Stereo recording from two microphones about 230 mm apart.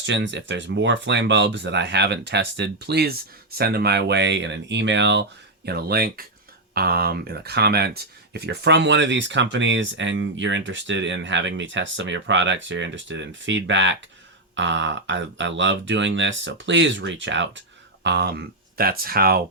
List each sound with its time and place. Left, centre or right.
0.0 s speech: right